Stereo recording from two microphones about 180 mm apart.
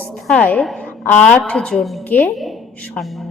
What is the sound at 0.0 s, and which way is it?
A woman's voice, 5° left (ahead or behind).